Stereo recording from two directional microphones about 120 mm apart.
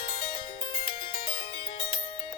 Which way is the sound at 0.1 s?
45° left (ahead or behind).